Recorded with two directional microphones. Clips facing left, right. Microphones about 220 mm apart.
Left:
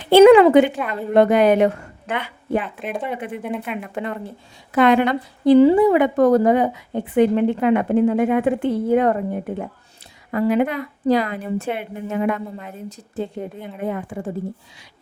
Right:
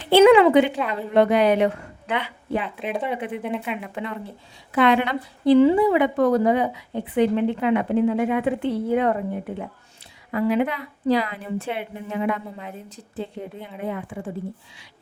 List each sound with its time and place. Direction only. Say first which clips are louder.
0.1 s a woman's voice: left 4 dB; 45° left (ahead or behind)
2.6 s speech: even; centre (ahead or behind)
3.2 s a woman's voice: even; 45° left (ahead or behind)
3.4 s speech: left 1 dB; centre (ahead or behind)
3.8 s a woman's voice: left 3 dB; 45° left (ahead or behind)